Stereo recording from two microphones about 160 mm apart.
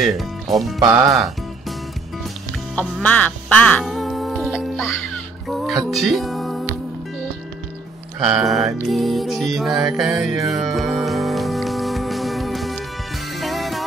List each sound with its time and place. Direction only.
0.0 s speech: centre (ahead or behind)
0.8 s speech: 25° right (ahead or behind)
2.7 s quack: 10° left (ahead or behind)
5.5 s music: centre (ahead or behind)
8.5 s speech: 20° right (ahead or behind)
8.8 s music: centre (ahead or behind)